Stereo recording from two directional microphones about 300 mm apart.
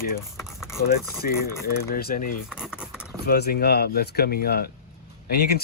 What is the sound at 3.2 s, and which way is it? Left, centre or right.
Speech, left.